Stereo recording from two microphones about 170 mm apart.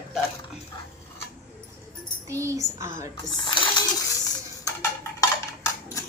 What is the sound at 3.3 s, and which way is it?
Coin, 25° left (ahead or behind).